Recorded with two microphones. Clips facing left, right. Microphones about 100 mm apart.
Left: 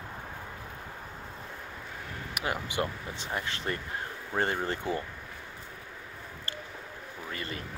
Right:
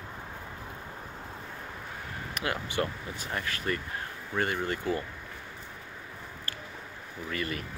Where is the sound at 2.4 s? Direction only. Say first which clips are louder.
Even; 15° left (ahead or behind).